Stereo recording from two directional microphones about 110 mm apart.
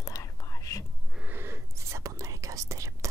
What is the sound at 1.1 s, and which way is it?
Whispering, 15° right (ahead or behind).